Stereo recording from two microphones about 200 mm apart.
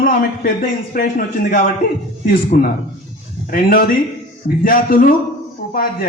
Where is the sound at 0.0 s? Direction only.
45° left (ahead or behind).